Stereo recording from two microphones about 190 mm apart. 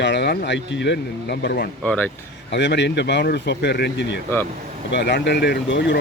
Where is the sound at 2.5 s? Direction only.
65° left (ahead or behind).